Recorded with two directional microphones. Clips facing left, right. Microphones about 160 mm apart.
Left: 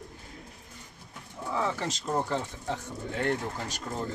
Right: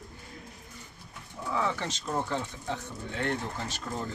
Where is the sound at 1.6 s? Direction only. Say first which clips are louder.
Left 1 dB; 35° left (ahead or behind).